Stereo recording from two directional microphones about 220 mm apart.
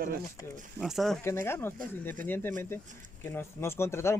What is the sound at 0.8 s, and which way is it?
Speech, centre (ahead or behind).